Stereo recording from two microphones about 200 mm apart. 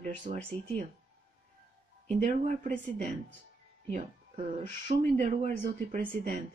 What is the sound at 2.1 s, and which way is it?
Speech, 35° right (ahead or behind).